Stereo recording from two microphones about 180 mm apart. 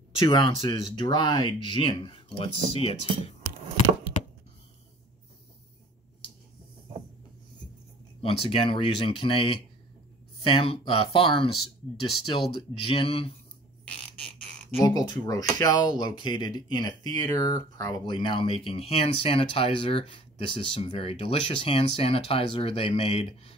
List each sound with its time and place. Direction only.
0.3 s speech: 25° left (ahead or behind)
8.2 s speech: 30° left (ahead or behind)
14.8 s speech: 20° left (ahead or behind)